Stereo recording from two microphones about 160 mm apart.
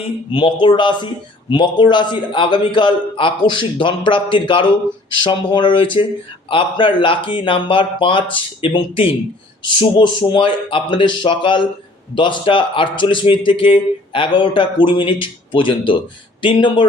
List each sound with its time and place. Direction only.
0.3 s a man's voice: 30° left (ahead or behind)